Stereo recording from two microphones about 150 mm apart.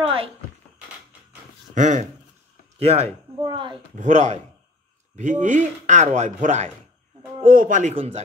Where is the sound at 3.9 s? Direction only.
50° right (ahead or behind).